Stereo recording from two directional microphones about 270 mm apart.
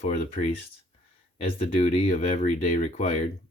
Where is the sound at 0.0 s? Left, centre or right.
Left.